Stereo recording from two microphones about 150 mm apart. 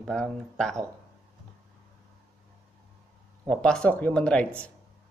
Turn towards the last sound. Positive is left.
turn(degrees=10)  # may be behind; listen again after turning